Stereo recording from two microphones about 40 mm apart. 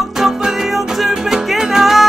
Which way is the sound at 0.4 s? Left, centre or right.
Centre.